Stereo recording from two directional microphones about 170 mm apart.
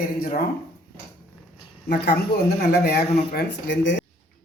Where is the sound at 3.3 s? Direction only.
90° left.